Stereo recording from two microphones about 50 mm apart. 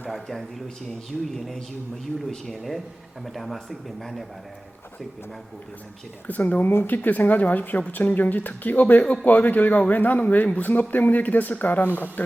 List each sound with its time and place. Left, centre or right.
0.1 s speech: centre
2.1 s speech: centre
6.2 s a man's voice: left